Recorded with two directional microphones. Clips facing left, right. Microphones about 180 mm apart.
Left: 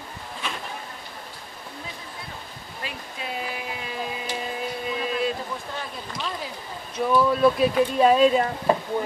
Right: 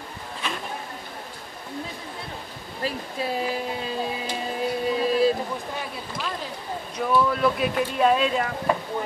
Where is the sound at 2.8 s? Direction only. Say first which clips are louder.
Right 7 dB; 35° right (ahead or behind).